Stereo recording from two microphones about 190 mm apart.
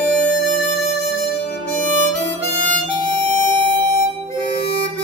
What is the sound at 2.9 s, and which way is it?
Music, 25° right (ahead or behind).